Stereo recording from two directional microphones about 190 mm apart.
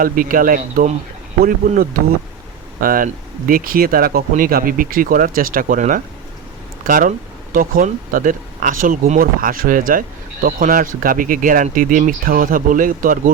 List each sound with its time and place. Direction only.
0.0 s speech: 45° right (ahead or behind)